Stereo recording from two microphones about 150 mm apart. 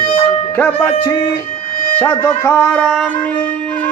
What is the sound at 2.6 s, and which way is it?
Music, 5° left (ahead or behind).